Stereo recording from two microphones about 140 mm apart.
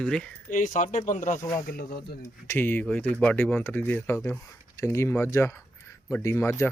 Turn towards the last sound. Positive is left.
turn(degrees=15)  # may be behind; listen again after turning